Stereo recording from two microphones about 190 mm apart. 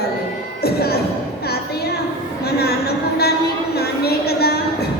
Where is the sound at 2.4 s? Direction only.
55° left (ahead or behind).